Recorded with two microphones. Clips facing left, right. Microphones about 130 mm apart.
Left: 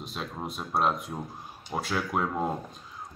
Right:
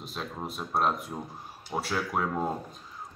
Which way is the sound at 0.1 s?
Centre (ahead or behind).